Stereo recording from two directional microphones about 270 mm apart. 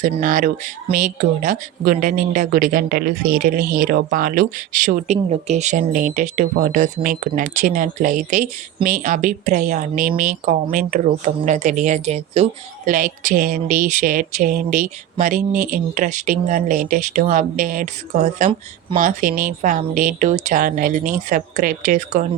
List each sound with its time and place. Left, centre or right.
0.0 s speech: right